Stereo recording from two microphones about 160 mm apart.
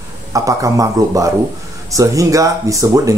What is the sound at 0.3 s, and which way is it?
Speech, 20° right (ahead or behind).